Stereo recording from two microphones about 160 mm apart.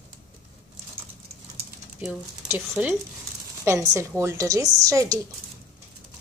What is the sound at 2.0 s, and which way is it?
Speech, 10° right (ahead or behind).